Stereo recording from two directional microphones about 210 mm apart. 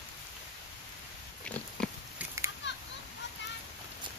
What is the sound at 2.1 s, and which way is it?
Children playing, 15° right (ahead or behind).